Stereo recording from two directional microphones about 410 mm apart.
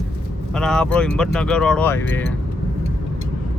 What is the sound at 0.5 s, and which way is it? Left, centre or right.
Speech, centre.